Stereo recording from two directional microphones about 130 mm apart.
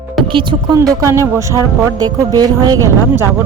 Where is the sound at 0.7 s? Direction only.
25° right (ahead or behind).